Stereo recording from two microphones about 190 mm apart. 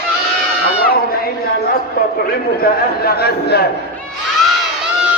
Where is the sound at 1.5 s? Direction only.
55° left (ahead or behind).